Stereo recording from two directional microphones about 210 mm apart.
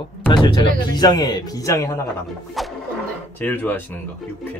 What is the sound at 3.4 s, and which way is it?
Speech, 10° left (ahead or behind).